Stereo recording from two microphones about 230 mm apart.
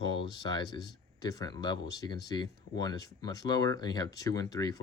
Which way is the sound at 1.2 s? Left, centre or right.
Centre.